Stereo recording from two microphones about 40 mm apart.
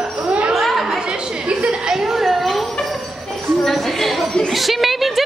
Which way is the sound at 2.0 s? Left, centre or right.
Centre.